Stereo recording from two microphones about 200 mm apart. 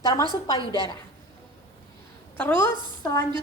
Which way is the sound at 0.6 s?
20° right (ahead or behind).